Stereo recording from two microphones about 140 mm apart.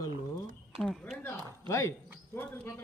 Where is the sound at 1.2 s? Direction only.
20° left (ahead or behind).